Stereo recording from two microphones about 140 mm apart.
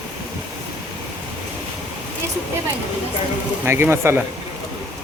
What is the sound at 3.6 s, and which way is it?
Speech, 15° right (ahead or behind).